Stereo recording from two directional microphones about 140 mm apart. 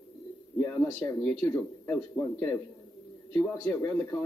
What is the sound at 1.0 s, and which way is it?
A man's voice, 15° left (ahead or behind).